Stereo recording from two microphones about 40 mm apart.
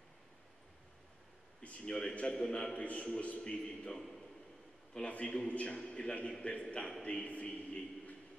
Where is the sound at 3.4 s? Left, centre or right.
Left.